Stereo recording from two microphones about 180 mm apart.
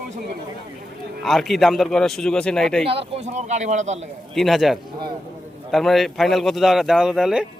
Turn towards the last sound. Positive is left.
turn(degrees=-5)  # may be behind; listen again after turning